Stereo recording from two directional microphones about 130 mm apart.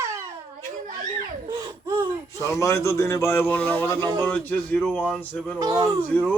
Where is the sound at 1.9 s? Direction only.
25° left (ahead or behind).